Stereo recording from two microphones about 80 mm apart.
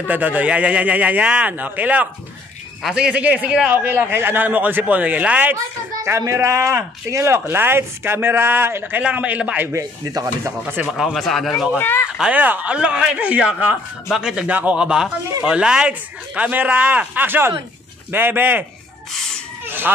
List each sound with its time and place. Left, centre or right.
0.1 s speech: right
3.7 s speech: right
6.0 s speech: right
9.0 s speech: centre
10.8 s speech: centre
11.1 s speech: centre
11.8 s speech: left
12.2 s speech: centre
14.0 s speech: centre
14.5 s speech: centre